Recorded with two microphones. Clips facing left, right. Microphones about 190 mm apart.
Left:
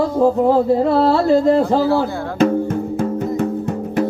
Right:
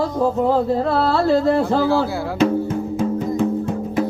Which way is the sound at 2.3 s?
55° left (ahead or behind).